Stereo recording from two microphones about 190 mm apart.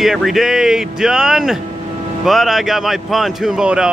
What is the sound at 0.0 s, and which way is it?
Speech, centre (ahead or behind).